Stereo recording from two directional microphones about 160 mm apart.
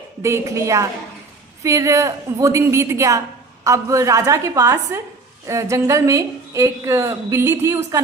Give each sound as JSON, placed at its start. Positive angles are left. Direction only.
{"t": 0.2, "sound": "a woman's voice", "side_deg": -15}